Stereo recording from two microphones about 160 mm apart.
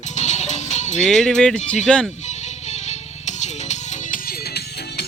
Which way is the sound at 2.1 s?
45° left (ahead or behind).